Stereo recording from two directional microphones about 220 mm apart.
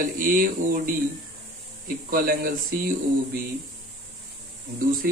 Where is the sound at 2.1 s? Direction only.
40° right (ahead or behind).